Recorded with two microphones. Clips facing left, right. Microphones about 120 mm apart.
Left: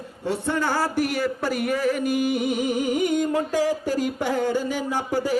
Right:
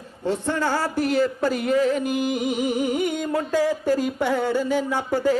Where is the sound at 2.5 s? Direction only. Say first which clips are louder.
Even; 15° right (ahead or behind).